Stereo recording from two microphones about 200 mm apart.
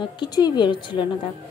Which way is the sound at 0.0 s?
20° left (ahead or behind).